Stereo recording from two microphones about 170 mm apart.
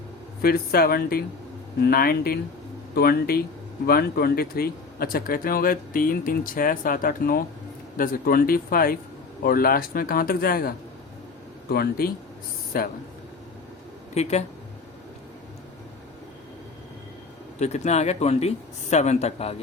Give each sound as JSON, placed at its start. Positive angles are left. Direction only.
{"t": 0.4, "sound": "speech", "side_deg": 60}
{"t": 14.1, "sound": "speech", "side_deg": 40}
{"t": 17.6, "sound": "speech", "side_deg": 40}